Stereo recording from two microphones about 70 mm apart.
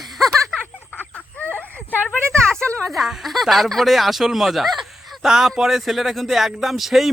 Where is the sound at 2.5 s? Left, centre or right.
Centre.